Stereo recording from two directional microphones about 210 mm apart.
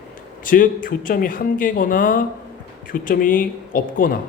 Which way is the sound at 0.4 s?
40° left (ahead or behind).